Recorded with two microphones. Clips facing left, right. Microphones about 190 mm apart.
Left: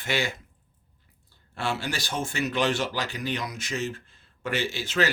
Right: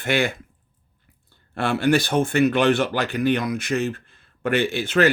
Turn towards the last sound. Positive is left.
turn(degrees=-55)  # may be behind; listen again after turning